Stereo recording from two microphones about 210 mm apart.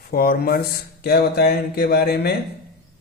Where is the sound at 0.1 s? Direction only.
45° left (ahead or behind).